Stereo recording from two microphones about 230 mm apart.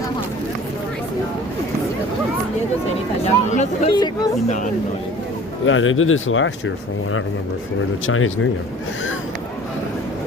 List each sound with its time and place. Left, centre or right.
3.2 s speech: left
3.9 s speech: centre
4.4 s speech: left
5.6 s speech: left
8.0 s speech: left